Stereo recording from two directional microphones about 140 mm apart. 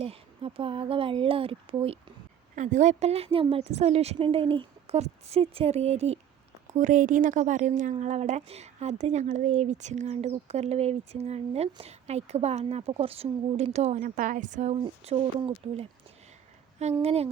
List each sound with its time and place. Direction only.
0.0 s speech: 45° right (ahead or behind)
2.6 s speech: 60° right (ahead or behind)
6.7 s speech: 65° right (ahead or behind)
14.0 s speech: 65° right (ahead or behind); by 15.9 s 45° right (ahead or behind)
17.0 s speech: 45° right (ahead or behind)